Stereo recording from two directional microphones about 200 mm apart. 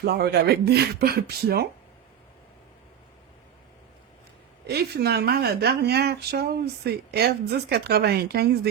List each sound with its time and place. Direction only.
0.0 s speech: 55° right (ahead or behind)
4.6 s speech: 55° right (ahead or behind)